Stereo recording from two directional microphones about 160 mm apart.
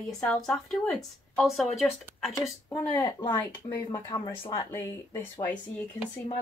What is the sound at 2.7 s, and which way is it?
Speech, 20° left (ahead or behind).